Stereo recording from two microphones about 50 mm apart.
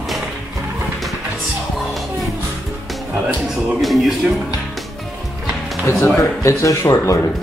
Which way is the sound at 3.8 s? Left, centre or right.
Centre.